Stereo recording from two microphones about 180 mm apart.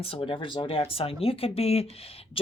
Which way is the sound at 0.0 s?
30° left (ahead or behind).